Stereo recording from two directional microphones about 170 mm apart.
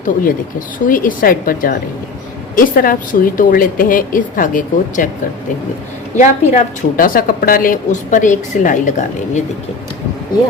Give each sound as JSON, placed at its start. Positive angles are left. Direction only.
{"t": 0.0, "sound": "a woman's voice", "side_deg": 55}
{"t": 6.1, "sound": "a woman's voice", "side_deg": 45}